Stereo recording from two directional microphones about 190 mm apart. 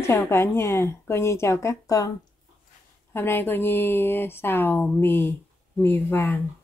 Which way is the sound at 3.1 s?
10° left (ahead or behind).